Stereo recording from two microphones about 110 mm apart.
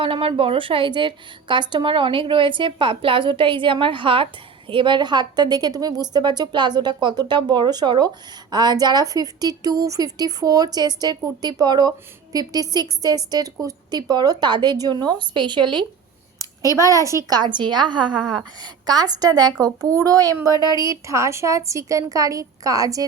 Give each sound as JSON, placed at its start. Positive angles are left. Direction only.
{"t": 0.0, "sound": "a woman's voice", "side_deg": -55}
{"t": 16.7, "sound": "a woman's voice", "side_deg": -30}
{"t": 20.5, "sound": "speech", "side_deg": 35}
{"t": 20.7, "sound": "a woman's voice", "side_deg": -30}